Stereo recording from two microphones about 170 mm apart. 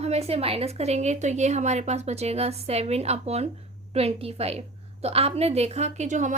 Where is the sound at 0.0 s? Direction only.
40° right (ahead or behind).